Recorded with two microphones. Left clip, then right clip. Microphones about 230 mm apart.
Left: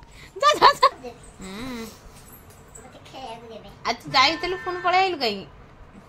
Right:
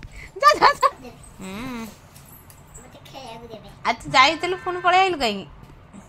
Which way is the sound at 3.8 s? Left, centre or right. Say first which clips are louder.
Right 3 dB; centre.